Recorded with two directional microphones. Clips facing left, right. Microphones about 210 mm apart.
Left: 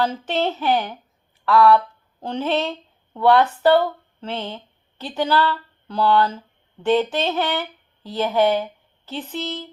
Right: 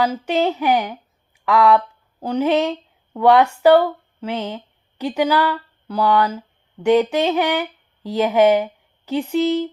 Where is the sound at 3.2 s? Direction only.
15° right (ahead or behind).